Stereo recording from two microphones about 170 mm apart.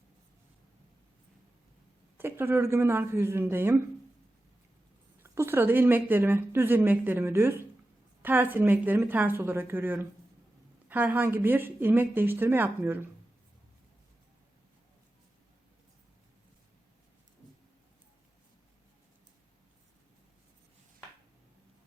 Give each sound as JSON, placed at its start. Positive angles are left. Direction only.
{"t": 2.1, "sound": "a woman's voice", "side_deg": -15}
{"t": 5.2, "sound": "a woman's voice", "side_deg": -15}